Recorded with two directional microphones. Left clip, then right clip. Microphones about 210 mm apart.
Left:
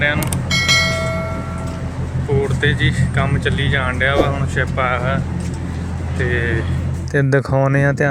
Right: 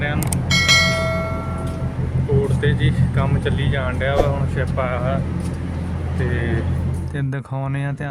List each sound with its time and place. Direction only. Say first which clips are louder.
0.0 s bell: left 6 dB; centre (ahead or behind)
2.6 s speech: left 5 dB; centre (ahead or behind)
6.3 s speech: left 6 dB; centre (ahead or behind)
7.1 s speech: left 16 dB; 30° left (ahead or behind)